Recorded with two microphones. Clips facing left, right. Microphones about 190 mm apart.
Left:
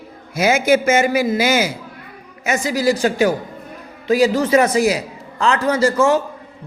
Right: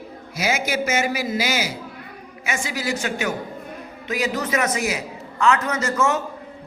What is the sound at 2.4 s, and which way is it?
A man's voice, 40° left (ahead or behind).